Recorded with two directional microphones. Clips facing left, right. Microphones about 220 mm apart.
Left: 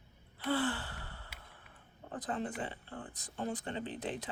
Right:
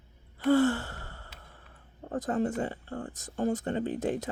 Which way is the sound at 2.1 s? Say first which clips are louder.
Right 9 dB; 45° right (ahead or behind).